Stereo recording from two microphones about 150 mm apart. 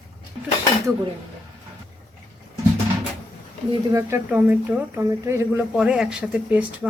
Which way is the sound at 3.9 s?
15° right (ahead or behind).